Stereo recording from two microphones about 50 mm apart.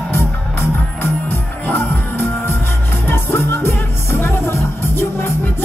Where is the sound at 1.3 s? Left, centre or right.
Left.